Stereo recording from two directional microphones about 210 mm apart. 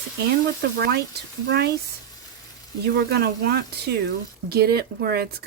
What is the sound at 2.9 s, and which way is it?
A woman's voice, 50° right (ahead or behind).